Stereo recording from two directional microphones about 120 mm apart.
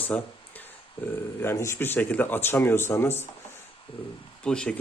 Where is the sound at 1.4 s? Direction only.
20° left (ahead or behind).